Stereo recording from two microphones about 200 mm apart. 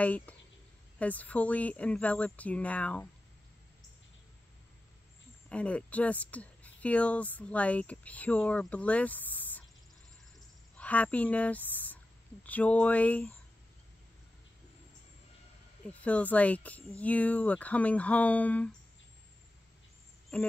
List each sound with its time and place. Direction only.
0.0 s speech: 5° left (ahead or behind)
5.5 s speech: 5° left (ahead or behind)
10.8 s speech: 5° left (ahead or behind)
15.9 s speech: 5° left (ahead or behind)